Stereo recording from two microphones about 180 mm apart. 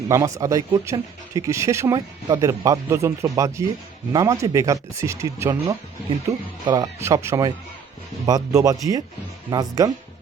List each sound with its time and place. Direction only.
0.1 s speech: 15° right (ahead or behind)